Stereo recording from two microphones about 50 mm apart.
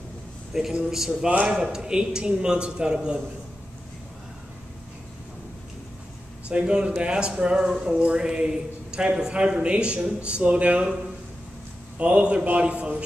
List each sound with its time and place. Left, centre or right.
0.5 s speech: centre
1.3 s a man's voice: right
1.6 s speech: centre
6.5 s a man's voice: centre
12.0 s a man's voice: right